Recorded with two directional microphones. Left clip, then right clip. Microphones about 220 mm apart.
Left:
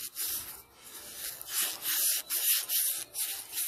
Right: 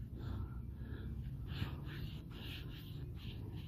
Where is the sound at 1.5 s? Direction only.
Centre (ahead or behind).